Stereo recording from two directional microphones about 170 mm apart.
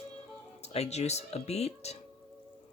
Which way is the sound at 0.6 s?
40° left (ahead or behind).